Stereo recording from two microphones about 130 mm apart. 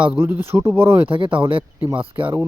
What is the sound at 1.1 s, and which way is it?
Speech, 40° right (ahead or behind).